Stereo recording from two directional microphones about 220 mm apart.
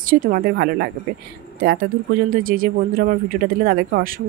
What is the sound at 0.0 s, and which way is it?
Speech, 40° right (ahead or behind).